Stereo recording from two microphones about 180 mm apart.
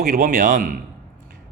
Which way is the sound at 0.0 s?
55° right (ahead or behind).